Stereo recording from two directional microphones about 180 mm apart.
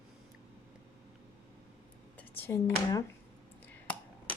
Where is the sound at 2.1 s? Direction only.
10° left (ahead or behind).